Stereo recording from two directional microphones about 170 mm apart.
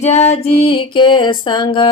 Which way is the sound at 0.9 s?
25° left (ahead or behind).